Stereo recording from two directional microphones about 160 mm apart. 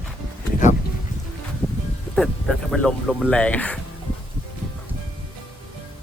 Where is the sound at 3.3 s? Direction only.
10° left (ahead or behind).